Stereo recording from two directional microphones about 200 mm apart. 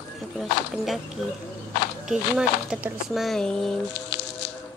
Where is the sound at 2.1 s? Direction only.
5° right (ahead or behind).